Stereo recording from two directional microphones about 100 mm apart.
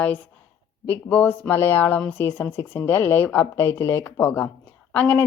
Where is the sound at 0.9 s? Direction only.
15° left (ahead or behind).